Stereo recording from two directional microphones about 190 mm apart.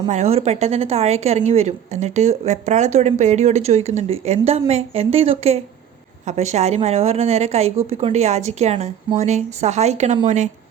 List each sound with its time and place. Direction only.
0.1 s a woman's voice: 35° right (ahead or behind)